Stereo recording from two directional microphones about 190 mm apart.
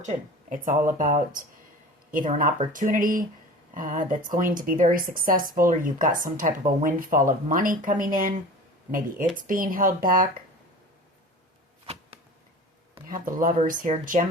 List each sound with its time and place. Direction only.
0.5 s speech: 45° right (ahead or behind)
13.1 s speech: 45° right (ahead or behind)